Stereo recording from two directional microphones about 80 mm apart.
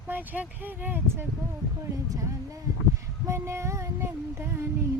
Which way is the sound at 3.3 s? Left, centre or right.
Right.